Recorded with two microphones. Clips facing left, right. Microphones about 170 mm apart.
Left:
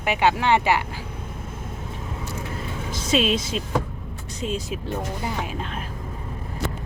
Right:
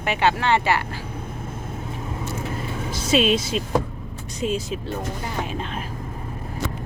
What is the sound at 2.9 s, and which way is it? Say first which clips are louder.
Speech: right 2 dB; 5° right (ahead or behind).